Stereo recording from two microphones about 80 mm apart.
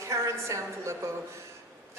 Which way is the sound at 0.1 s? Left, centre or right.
Right.